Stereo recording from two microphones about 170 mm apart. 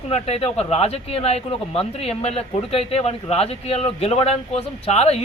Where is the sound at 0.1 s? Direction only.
35° left (ahead or behind).